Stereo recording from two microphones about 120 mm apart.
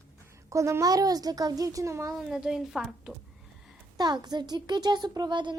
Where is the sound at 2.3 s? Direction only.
5° right (ahead or behind).